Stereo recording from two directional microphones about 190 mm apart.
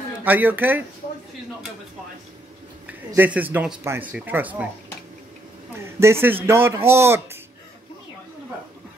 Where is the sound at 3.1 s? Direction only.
10° right (ahead or behind).